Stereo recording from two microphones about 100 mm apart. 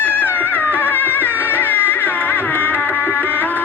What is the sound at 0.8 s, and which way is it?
Music, 20° left (ahead or behind).